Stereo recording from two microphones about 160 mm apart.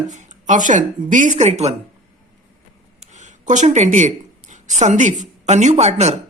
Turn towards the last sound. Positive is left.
turn(degrees=-45)  # may be behind; listen again after turning